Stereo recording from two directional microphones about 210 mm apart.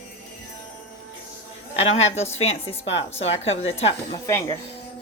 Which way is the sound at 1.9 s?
30° left (ahead or behind).